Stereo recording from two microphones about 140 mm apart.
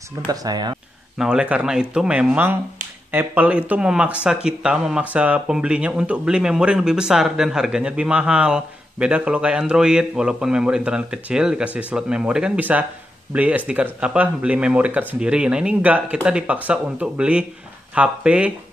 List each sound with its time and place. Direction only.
0.3 s speech: 25° right (ahead or behind)
1.1 s speech: 5° right (ahead or behind)